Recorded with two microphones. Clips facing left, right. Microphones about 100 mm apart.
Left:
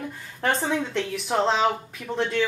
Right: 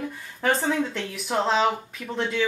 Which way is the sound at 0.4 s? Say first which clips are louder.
Right 1 dB; centre (ahead or behind).